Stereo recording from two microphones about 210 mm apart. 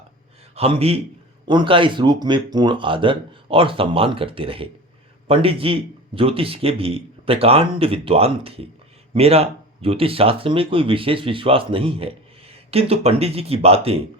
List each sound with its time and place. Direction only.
0.5 s speech: 30° right (ahead or behind)